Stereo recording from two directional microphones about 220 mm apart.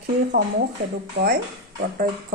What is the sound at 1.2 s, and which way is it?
Speech, 50° right (ahead or behind).